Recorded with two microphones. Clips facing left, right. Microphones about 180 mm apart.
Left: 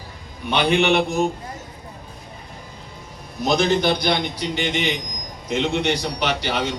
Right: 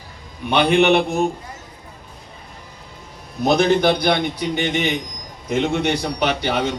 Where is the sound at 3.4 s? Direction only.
55° right (ahead or behind).